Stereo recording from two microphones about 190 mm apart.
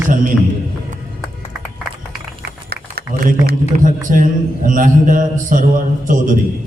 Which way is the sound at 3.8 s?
45° right (ahead or behind).